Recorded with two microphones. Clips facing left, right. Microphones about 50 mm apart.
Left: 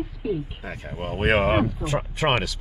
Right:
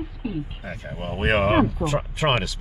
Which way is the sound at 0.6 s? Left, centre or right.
Left.